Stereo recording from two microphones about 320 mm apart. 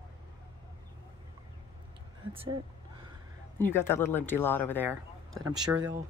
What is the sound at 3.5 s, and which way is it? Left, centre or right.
Speech, centre.